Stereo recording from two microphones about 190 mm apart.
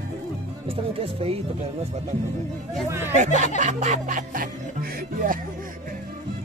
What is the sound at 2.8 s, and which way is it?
Speech, 15° right (ahead or behind).